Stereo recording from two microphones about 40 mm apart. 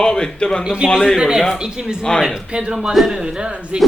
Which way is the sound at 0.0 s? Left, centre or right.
Left.